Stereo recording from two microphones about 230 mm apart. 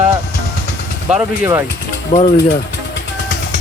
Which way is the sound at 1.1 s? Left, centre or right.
Centre.